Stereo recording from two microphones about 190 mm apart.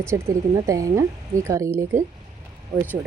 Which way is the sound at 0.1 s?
15° right (ahead or behind).